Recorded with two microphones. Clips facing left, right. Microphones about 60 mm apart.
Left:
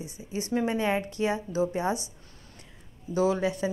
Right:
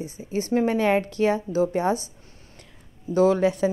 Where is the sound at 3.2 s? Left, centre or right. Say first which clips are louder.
Right 6 dB; right.